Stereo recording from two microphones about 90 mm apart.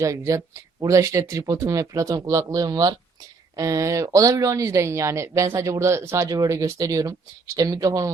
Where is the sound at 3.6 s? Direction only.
35° right (ahead or behind).